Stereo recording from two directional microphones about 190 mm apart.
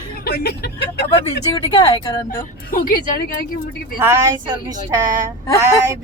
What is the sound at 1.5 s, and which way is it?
Speech, 30° left (ahead or behind).